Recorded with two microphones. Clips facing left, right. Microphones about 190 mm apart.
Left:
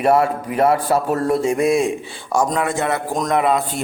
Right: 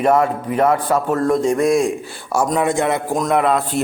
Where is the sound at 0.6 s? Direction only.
35° left (ahead or behind).